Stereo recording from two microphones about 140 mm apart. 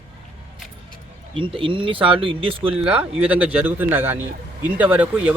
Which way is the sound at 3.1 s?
10° right (ahead or behind).